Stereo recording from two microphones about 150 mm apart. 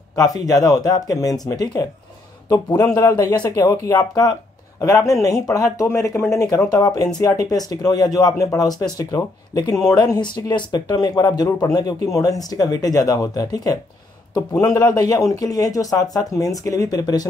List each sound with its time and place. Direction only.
0.1 s speech: 25° left (ahead or behind)